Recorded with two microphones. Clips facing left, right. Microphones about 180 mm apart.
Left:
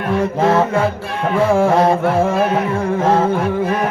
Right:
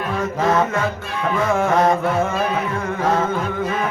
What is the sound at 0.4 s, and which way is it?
Music, 30° left (ahead or behind).